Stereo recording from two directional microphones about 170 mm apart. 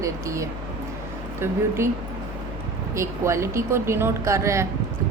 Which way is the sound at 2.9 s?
15° right (ahead or behind).